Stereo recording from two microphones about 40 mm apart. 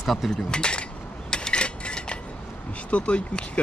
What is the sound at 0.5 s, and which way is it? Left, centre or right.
Speech, left.